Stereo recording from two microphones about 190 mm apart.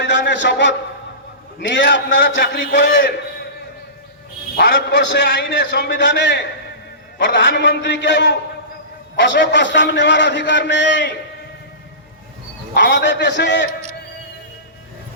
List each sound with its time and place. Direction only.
0.0 s a man's voice: 70° left (ahead or behind)
4.5 s a man's voice: 65° left (ahead or behind)
12.7 s a man's voice: 70° left (ahead or behind)